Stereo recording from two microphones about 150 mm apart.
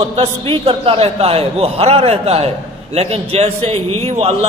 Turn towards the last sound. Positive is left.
turn(degrees=-45)  # may be behind; listen again after turning